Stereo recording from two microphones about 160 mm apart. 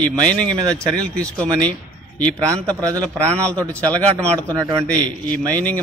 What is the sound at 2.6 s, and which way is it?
Speech, 20° right (ahead or behind).